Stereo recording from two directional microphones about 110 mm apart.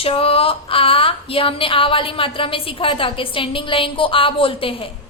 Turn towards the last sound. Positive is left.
turn(degrees=55)  # may be behind; listen again after turning